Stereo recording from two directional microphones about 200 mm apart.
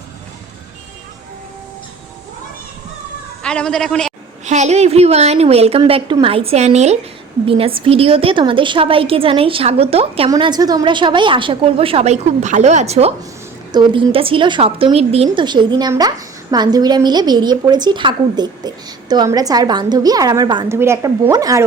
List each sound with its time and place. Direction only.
3.4 s a woman's voice: 5° left (ahead or behind)
4.4 s a woman's voice: 35° right (ahead or behind); by 21.6 s 15° right (ahead or behind)